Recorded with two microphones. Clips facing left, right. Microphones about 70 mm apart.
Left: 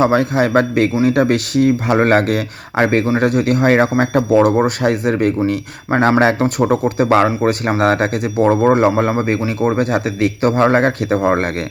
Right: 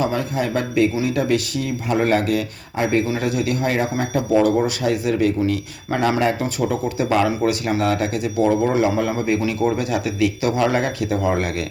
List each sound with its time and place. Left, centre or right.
0.0 s speech: left
4.4 s speech: left
7.3 s speech: left